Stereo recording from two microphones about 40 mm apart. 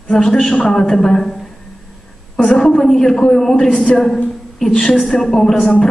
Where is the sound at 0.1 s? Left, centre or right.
Centre.